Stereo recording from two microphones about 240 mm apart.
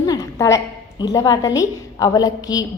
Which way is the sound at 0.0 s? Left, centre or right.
Centre.